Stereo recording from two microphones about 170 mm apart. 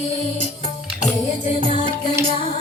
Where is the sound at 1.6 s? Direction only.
30° right (ahead or behind).